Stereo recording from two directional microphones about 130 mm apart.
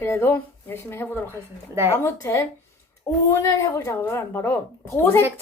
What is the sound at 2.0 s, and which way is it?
Speech, 20° left (ahead or behind).